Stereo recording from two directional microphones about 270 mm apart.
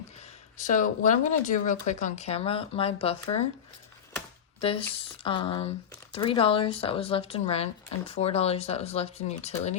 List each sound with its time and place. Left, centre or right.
0.2 s speech: left
5.2 s speech: centre